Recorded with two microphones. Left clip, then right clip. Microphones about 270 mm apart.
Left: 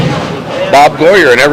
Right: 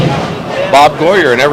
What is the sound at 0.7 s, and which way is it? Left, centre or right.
Speech, left.